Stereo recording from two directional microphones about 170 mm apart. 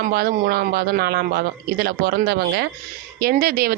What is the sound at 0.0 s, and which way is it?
Speech, 65° right (ahead or behind).